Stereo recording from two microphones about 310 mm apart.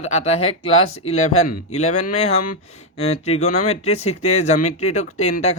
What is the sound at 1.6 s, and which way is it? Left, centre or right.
Speech, left.